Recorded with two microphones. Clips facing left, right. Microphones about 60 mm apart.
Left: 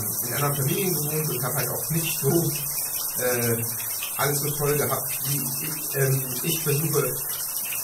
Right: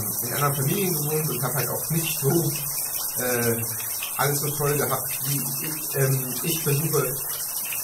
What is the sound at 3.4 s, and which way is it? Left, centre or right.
Speech, right.